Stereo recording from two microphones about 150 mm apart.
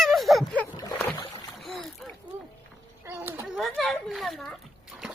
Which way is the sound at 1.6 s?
Centre (ahead or behind).